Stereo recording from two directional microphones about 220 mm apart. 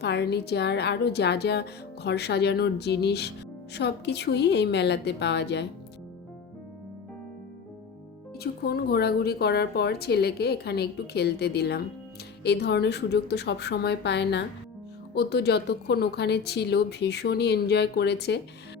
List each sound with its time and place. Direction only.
0.0 s speech: 50° left (ahead or behind)
8.6 s speech: 45° left (ahead or behind)